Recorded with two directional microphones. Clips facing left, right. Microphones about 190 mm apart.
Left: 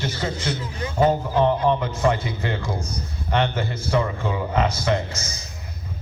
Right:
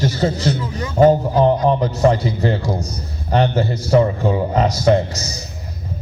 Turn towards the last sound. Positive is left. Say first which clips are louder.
# right 8 dB
turn(degrees=-40)  # may be behind; listen again after turning